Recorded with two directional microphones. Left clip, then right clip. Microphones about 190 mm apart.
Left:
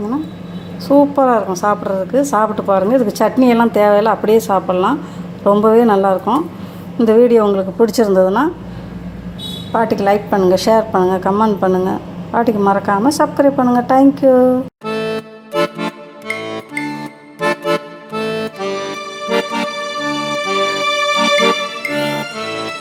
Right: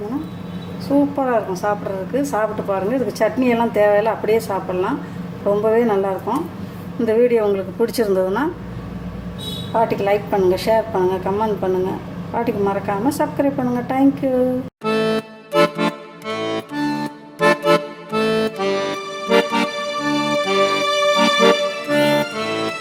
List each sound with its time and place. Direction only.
0.9 s a woman's voice: 40° left (ahead or behind); by 8.4 s 15° left (ahead or behind)
9.9 s a woman's voice: 35° left (ahead or behind)
14.8 s music: centre (ahead or behind)